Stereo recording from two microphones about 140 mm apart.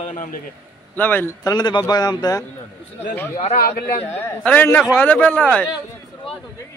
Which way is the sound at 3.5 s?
90° left.